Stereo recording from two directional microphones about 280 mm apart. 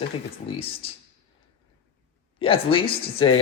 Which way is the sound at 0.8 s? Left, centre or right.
Centre.